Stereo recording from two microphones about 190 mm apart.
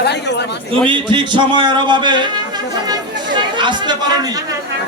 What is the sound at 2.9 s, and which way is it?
Chatter, 25° right (ahead or behind).